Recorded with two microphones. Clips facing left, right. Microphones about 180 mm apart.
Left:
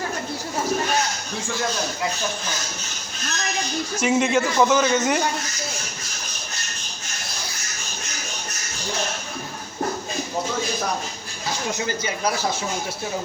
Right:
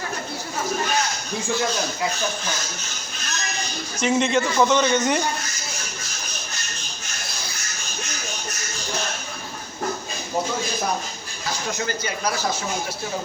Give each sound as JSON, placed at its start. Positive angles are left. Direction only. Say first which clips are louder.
{"t": 4.0, "sound": "a man's voice", "louder": "even", "side_deg": 5}
{"t": 11.9, "sound": "speech", "louder": "left 2 dB", "side_deg": 20}